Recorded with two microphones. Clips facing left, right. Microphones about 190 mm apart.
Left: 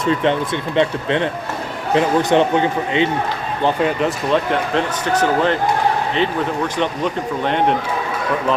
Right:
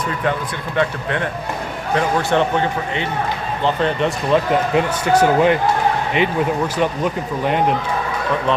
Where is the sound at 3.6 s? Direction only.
5° left (ahead or behind).